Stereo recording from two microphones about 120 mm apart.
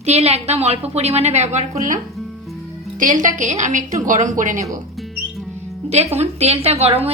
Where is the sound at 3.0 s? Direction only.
90° right.